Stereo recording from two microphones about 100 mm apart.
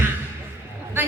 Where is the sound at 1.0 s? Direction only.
20° right (ahead or behind).